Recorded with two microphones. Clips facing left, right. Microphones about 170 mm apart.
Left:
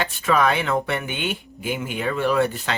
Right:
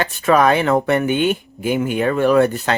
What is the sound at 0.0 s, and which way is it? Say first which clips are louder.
Speech: right 5 dB; 45° right (ahead or behind).